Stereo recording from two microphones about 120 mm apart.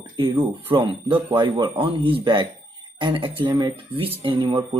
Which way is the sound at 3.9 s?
45° right (ahead or behind).